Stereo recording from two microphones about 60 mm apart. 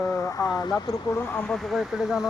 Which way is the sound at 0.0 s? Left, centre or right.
Left.